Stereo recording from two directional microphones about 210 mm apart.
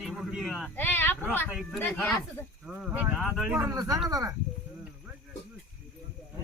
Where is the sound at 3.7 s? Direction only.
15° right (ahead or behind).